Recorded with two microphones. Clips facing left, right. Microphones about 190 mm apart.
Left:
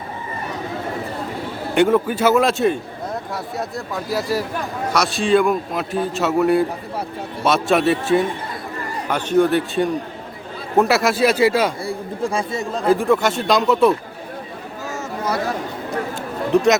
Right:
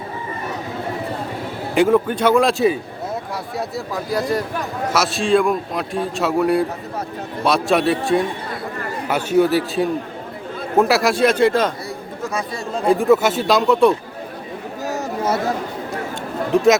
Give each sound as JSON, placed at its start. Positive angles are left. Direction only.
{"t": 1.7, "sound": "a man's voice", "side_deg": 0}
{"t": 11.9, "sound": "chatter", "side_deg": 30}
{"t": 12.8, "sound": "a man's voice", "side_deg": 0}
{"t": 14.8, "sound": "a sound", "side_deg": -30}